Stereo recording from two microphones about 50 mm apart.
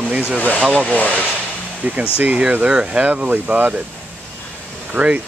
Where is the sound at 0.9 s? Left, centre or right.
Left.